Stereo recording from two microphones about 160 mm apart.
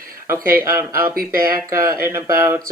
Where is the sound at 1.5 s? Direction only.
20° right (ahead or behind).